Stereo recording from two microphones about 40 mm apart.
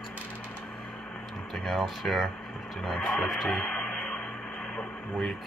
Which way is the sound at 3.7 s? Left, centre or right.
Centre.